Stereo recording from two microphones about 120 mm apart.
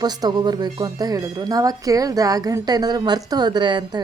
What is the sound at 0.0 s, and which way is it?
Speech, 35° right (ahead or behind).